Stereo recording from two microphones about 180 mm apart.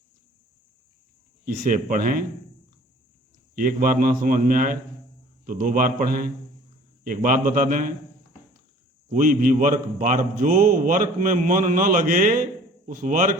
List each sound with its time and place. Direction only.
1.5 s a man's voice: 50° right (ahead or behind)
3.5 s a man's voice: 50° right (ahead or behind)
9.0 s a man's voice: 50° right (ahead or behind)